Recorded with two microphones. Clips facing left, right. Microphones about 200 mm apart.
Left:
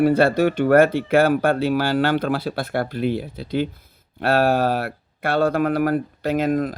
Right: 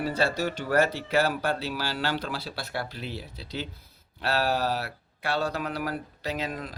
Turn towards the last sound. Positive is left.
turn(degrees=50)  # may be behind; listen again after turning